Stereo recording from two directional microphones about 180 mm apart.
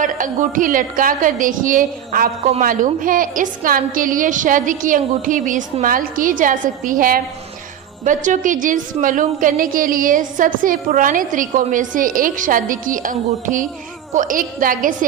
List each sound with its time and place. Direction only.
0.0 s a woman's voice: 50° right (ahead or behind)